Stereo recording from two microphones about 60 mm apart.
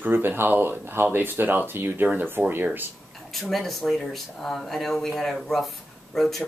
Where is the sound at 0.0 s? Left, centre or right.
Right.